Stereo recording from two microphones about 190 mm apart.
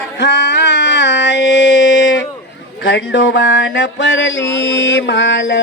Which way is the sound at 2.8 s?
65° left (ahead or behind).